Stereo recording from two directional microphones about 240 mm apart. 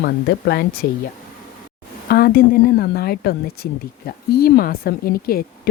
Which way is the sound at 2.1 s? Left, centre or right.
Left.